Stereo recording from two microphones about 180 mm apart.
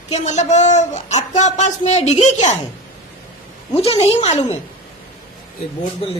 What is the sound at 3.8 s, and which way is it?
Speech, 35° left (ahead or behind).